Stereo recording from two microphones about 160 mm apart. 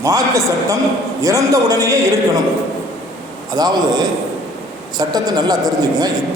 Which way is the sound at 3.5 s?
25° right (ahead or behind).